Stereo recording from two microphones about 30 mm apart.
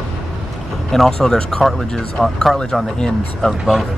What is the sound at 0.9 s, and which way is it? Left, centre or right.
Speech, centre.